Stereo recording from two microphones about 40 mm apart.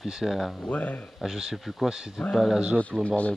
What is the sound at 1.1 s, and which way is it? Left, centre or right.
Speech, centre.